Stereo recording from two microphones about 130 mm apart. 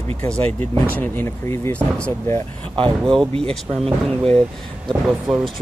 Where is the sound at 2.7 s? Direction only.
45° right (ahead or behind).